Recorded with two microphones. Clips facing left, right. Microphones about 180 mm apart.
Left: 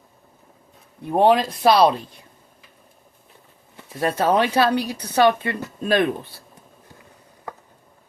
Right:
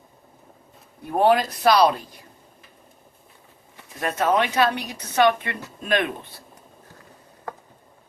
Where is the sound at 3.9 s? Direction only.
30° left (ahead or behind).